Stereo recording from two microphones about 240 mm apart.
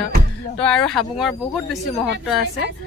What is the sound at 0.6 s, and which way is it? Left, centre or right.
Speech, centre.